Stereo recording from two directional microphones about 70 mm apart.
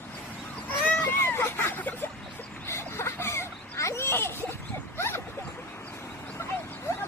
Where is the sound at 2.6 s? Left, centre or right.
Left.